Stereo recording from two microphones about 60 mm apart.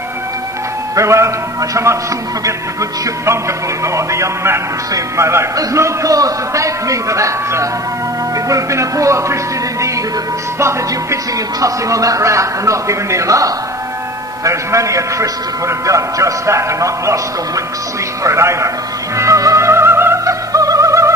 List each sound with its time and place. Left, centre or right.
0.9 s a man's voice: right
4.9 s music: right
5.8 s a man's voice: right
10.6 s music: right
11.6 s a man's voice: right
18.2 s a man's voice: right
19.1 s music: right
20.2 s music: right